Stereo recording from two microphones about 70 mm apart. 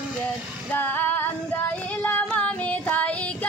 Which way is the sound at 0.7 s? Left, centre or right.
Left.